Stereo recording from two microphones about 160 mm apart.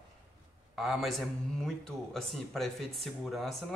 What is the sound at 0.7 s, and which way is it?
A man's voice, centre (ahead or behind).